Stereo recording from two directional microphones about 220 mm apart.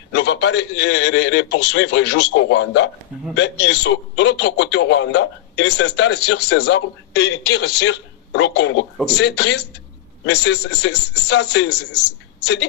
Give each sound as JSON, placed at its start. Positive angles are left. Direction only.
{"t": 0.1, "sound": "a man's voice", "side_deg": 50}